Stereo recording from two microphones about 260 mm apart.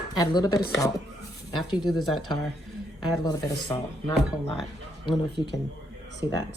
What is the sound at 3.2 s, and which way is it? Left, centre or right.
Speech, centre.